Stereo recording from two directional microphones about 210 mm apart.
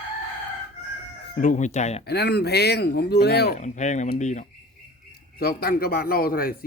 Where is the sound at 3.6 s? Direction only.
35° left (ahead or behind).